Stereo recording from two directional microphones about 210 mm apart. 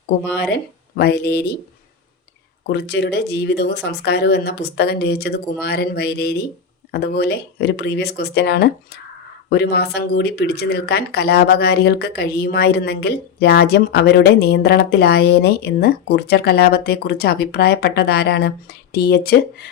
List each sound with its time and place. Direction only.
0.3 s speech: 55° left (ahead or behind)
2.6 s speech: 55° left (ahead or behind)